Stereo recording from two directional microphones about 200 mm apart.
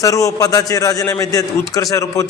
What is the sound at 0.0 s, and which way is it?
A man's voice, 15° left (ahead or behind).